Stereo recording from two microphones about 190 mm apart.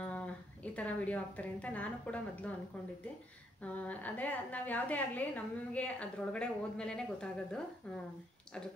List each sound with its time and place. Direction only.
0.0 s a sound: 5° left (ahead or behind)
0.7 s a woman's voice: 5° left (ahead or behind)
3.6 s a woman's voice: 10° left (ahead or behind)